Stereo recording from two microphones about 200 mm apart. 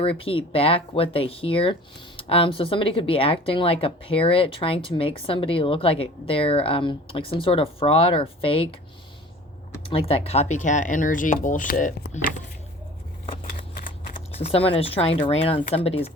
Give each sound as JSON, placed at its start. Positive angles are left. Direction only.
{"t": 0.0, "sound": "a woman's voice", "side_deg": 30}
{"t": 9.9, "sound": "speech", "side_deg": 30}
{"t": 14.1, "sound": "a woman's voice", "side_deg": 30}